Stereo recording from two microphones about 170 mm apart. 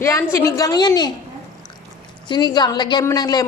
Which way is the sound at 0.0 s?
15° left (ahead or behind).